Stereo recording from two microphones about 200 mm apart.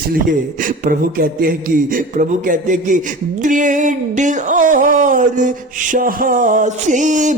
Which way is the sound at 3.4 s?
40° right (ahead or behind).